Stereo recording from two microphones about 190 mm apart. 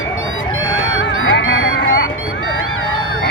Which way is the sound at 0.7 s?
80° left.